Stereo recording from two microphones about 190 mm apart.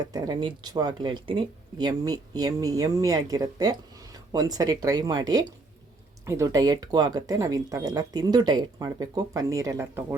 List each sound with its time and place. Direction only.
0.0 s speech: 20° right (ahead or behind)